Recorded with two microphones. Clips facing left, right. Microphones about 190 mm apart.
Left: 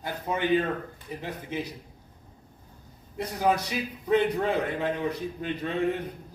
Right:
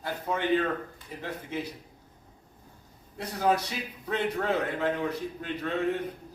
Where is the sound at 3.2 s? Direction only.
15° left (ahead or behind).